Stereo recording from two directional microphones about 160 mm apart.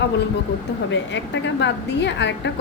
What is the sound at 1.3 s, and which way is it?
A woman's voice, 90° left.